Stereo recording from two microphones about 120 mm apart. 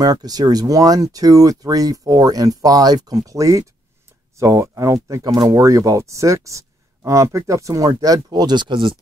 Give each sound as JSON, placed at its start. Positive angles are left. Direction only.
{"t": 0.0, "sound": "speech", "side_deg": -30}